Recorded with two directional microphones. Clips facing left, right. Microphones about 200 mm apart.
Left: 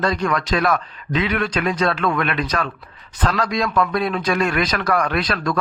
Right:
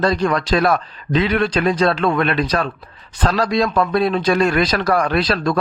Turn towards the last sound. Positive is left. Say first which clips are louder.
# right 4 dB
turn(degrees=-30)  # may be behind; listen again after turning